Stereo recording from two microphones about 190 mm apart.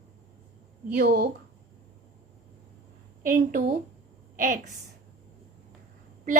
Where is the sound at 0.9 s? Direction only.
50° right (ahead or behind).